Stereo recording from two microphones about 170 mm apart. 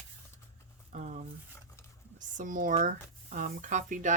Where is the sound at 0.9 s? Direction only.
45° right (ahead or behind).